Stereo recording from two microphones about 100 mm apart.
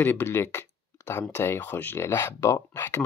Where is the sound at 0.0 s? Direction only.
25° left (ahead or behind).